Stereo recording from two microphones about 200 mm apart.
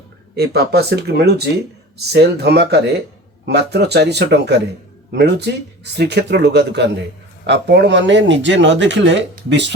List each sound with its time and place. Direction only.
0.3 s speech: 55° right (ahead or behind)